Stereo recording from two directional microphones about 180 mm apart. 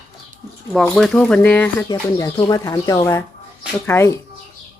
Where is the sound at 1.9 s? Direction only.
20° left (ahead or behind).